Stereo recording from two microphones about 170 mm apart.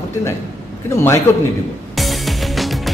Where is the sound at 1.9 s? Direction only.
Centre (ahead or behind).